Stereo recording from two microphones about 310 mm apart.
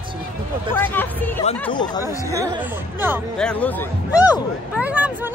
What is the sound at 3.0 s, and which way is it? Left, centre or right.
Speech, centre.